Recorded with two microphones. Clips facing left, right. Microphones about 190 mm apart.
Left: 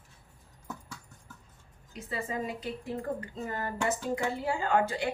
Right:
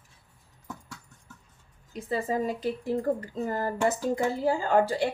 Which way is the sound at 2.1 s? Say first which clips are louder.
Right 6 dB; 35° right (ahead or behind).